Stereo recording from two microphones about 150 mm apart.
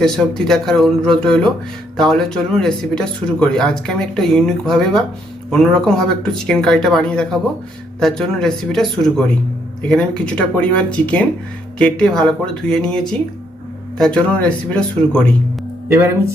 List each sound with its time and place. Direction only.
0.0 s speech: 5° left (ahead or behind)
15.9 s speech: 20° right (ahead or behind)